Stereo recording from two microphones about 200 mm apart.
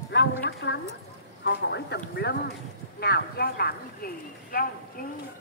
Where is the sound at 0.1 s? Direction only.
55° left (ahead or behind).